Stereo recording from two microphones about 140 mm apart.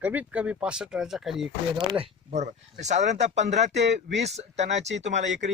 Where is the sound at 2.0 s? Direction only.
50° right (ahead or behind).